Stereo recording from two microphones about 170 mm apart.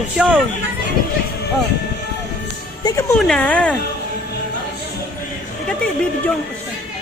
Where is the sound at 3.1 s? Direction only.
5° left (ahead or behind).